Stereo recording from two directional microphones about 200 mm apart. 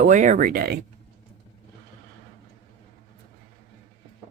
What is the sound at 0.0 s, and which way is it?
Speech, 40° right (ahead or behind).